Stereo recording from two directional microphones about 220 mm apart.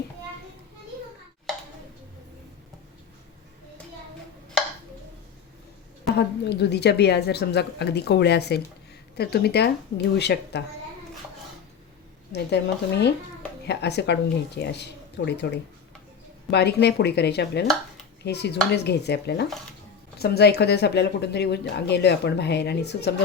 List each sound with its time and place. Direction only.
6.1 s speech: 50° left (ahead or behind)
12.3 s speech: 50° left (ahead or behind)